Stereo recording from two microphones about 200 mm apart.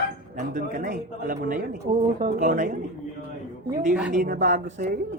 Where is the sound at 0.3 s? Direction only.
45° right (ahead or behind).